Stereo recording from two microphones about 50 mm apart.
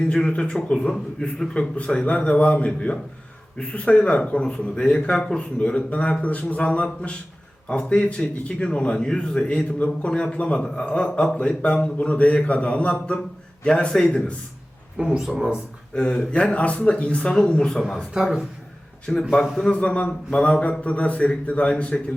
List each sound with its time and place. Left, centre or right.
0.0 s a man's voice: centre
1.2 s a man's voice: left
10.1 s a man's voice: centre
14.9 s speech: centre
16.0 s a man's voice: centre
17.7 s speech: centre
17.9 s speech: centre
19.1 s a man's voice: centre
19.7 s a man's voice: left